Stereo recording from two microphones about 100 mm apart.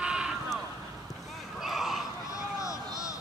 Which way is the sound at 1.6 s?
Centre (ahead or behind).